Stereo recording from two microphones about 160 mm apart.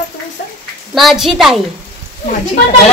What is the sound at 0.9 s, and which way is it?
Speech, centre (ahead or behind).